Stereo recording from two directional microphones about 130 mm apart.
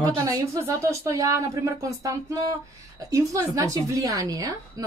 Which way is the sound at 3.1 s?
25° right (ahead or behind).